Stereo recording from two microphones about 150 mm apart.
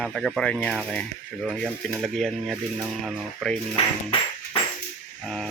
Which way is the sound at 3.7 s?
30° left (ahead or behind).